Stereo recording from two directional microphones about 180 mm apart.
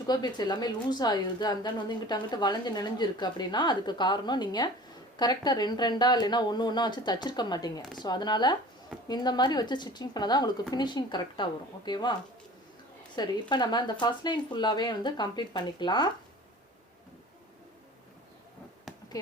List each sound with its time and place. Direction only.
0.1 s a woman's voice: 25° left (ahead or behind)
13.2 s a woman's voice: 25° left (ahead or behind)
18.9 s a sound: centre (ahead or behind)